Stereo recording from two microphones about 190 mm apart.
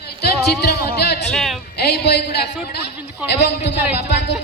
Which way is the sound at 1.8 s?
60° left (ahead or behind).